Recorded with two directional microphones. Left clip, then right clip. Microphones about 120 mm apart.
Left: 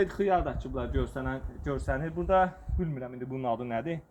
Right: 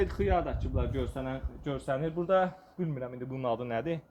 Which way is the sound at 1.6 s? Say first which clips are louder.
Left 2 dB; centre (ahead or behind).